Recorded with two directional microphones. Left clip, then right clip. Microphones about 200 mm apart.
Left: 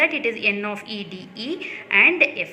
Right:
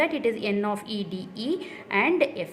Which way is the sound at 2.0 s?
45° right (ahead or behind).